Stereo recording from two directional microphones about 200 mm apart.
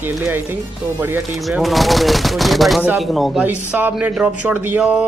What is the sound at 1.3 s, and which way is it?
Speech, centre (ahead or behind).